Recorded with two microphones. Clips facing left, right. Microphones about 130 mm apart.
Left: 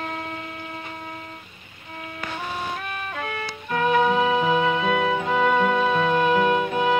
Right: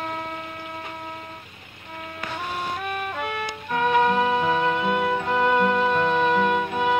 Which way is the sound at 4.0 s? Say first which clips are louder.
Left 1 dB; 10° left (ahead or behind).